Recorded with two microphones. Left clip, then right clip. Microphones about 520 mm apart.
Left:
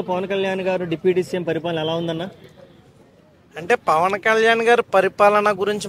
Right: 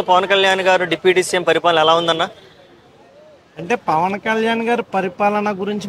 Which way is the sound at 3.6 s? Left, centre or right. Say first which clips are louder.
Even; left.